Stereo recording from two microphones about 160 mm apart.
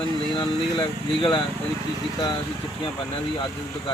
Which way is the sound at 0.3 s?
30° left (ahead or behind).